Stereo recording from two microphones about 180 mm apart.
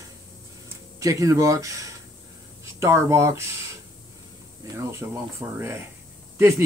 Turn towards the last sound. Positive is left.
turn(degrees=-15)  # may be behind; listen again after turning